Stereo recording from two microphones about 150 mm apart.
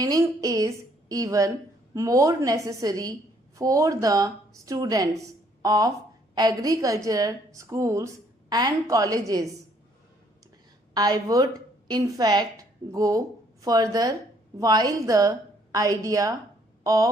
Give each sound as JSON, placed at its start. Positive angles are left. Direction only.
{"t": 0.0, "sound": "a woman's voice", "side_deg": -25}
{"t": 10.9, "sound": "a woman's voice", "side_deg": -25}
{"t": 16.8, "sound": "a sound", "side_deg": -25}